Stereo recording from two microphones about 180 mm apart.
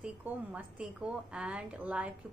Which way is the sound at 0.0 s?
10° right (ahead or behind).